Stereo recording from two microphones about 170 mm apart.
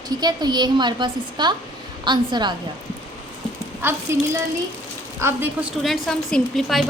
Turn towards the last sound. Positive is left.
turn(degrees=0)  # may be behind; listen again after turning